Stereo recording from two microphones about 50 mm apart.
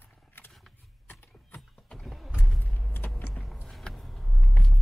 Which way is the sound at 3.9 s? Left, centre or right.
Centre.